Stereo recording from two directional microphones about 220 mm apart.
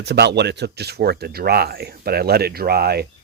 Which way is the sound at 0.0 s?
50° right (ahead or behind).